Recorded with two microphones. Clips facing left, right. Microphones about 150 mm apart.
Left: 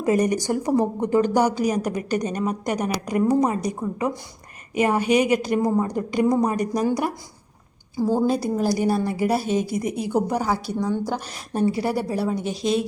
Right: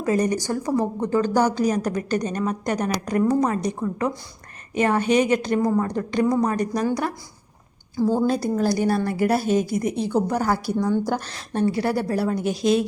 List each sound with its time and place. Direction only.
0.0 s a woman's voice: 20° left (ahead or behind); by 11.2 s centre (ahead or behind)
11.3 s a woman's voice: 10° left (ahead or behind)